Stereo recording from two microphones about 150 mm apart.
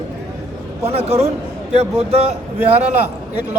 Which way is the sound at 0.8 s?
45° right (ahead or behind).